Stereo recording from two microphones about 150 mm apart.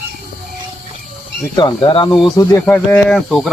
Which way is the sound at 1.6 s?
30° left (ahead or behind).